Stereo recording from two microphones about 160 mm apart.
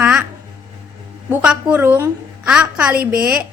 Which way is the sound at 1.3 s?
10° right (ahead or behind).